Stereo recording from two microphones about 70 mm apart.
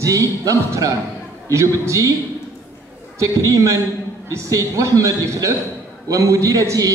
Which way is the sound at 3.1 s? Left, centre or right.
Right.